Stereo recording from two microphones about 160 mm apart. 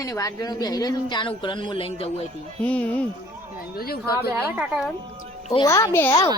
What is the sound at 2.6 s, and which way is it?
Speech, 10° left (ahead or behind).